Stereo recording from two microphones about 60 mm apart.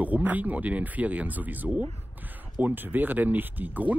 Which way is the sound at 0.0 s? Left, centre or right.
Right.